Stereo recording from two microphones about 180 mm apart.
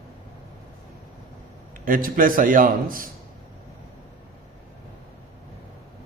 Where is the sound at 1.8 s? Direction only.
50° right (ahead or behind).